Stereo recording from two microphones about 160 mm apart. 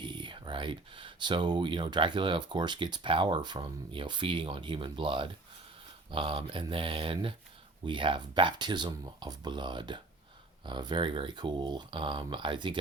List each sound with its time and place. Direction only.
0.0 s speech: 30° right (ahead or behind)